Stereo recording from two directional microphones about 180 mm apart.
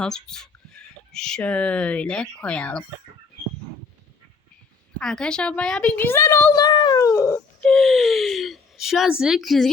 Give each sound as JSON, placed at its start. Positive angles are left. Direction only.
{"t": 0.0, "sound": "speech", "side_deg": 5}
{"t": 4.9, "sound": "a child's voice", "side_deg": 5}
{"t": 7.3, "sound": "speech", "side_deg": 5}